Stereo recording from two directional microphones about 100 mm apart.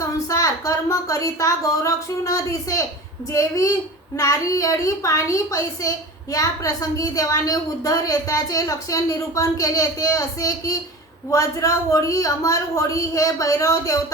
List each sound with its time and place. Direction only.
0.0 s a woman's voice: 35° left (ahead or behind)